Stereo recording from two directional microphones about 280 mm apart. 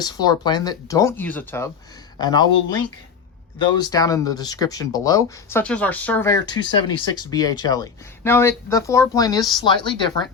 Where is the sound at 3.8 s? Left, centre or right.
Centre.